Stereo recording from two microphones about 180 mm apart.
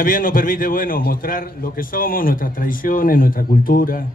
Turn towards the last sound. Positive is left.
turn(degrees=50)  # may be behind; listen again after turning